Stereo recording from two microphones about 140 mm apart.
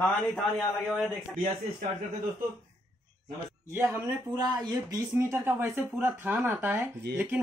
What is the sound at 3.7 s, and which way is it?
Speech, 20° right (ahead or behind).